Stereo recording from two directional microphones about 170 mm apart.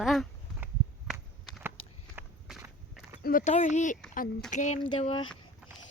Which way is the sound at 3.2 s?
50° left (ahead or behind).